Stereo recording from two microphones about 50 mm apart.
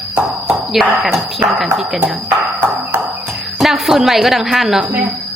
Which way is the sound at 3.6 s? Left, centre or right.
Centre.